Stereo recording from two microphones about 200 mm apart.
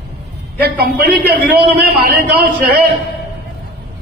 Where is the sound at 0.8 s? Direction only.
50° right (ahead or behind).